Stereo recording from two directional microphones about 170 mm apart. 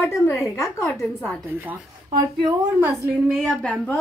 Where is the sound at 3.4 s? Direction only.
5° left (ahead or behind).